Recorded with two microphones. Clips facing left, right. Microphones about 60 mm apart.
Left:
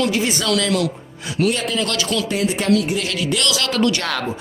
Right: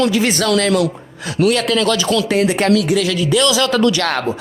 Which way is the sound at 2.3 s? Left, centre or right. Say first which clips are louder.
Right 5 dB; right.